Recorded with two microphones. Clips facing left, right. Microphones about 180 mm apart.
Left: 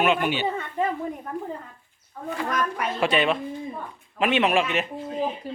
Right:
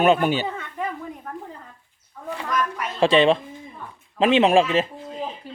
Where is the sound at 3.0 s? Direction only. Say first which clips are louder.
Right 7 dB; 30° right (ahead or behind).